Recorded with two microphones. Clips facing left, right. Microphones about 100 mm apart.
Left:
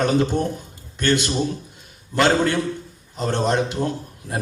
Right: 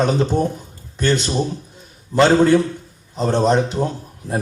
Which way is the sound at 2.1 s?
20° right (ahead or behind).